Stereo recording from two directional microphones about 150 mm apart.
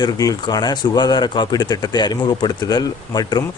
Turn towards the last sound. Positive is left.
turn(degrees=25)  # may be behind; listen again after turning